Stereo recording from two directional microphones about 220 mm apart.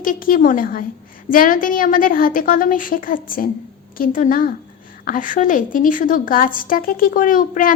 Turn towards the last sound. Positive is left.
turn(degrees=40)  # may be behind; listen again after turning